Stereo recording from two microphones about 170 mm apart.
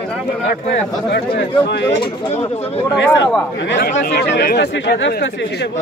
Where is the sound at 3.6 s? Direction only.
90° left.